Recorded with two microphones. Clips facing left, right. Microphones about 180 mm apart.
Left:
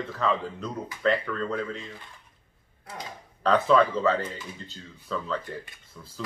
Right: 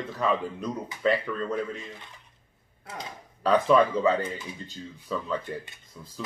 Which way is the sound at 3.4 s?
15° right (ahead or behind).